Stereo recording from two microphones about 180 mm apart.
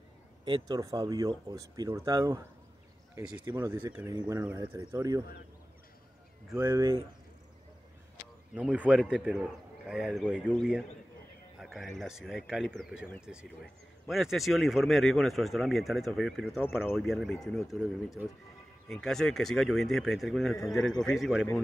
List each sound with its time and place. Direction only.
0.5 s speech: 20° right (ahead or behind)
3.4 s speech: 15° right (ahead or behind)
4.6 s speech: 20° right (ahead or behind)
6.5 s speech: 15° right (ahead or behind)
8.5 s speech: 10° right (ahead or behind)